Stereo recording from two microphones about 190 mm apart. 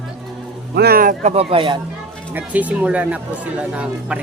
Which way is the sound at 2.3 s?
10° right (ahead or behind).